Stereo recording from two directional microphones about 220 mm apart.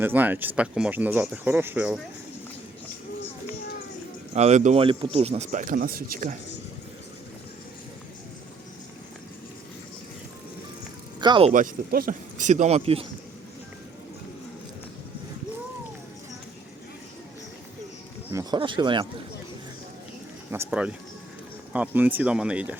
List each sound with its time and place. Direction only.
0.0 s speech: 10° right (ahead or behind)
4.4 s speech: 30° right (ahead or behind)
11.2 s speech: 20° right (ahead or behind)
11.5 s speech: 40° right (ahead or behind)
18.3 s speech: 15° right (ahead or behind)
20.5 s speech: 5° right (ahead or behind)